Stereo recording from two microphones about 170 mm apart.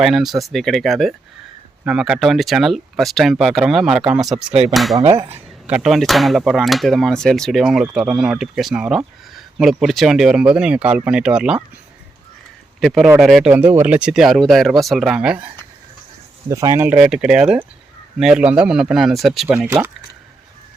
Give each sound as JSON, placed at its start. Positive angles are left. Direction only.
{"t": 0.0, "sound": "speech", "side_deg": 0}
{"t": 4.9, "sound": "speech", "side_deg": -35}
{"t": 5.6, "sound": "speech", "side_deg": -5}
{"t": 12.8, "sound": "speech", "side_deg": 0}
{"t": 16.5, "sound": "speech", "side_deg": -20}
{"t": 19.5, "sound": "speech", "side_deg": -15}